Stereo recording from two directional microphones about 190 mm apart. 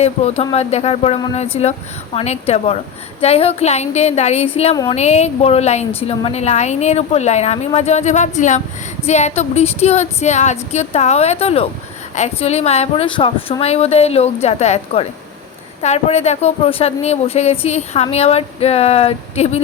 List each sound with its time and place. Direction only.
0.0 s speech: 35° left (ahead or behind)